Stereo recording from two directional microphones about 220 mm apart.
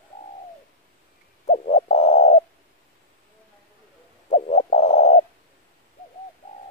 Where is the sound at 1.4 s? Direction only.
30° left (ahead or behind).